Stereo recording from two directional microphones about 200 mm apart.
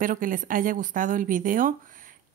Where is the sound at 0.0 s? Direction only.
45° right (ahead or behind).